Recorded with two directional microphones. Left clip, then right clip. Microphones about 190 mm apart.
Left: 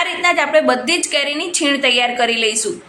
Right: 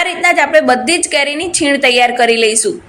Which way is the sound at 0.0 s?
20° right (ahead or behind).